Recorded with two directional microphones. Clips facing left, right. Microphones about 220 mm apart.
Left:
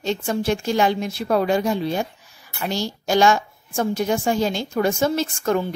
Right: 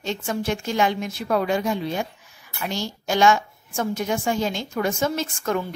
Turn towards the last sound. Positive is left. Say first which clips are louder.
# left 4 dB
turn(degrees=35)  # may be behind; listen again after turning